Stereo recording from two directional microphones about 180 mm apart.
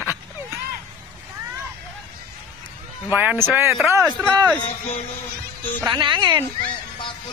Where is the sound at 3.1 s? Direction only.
10° right (ahead or behind).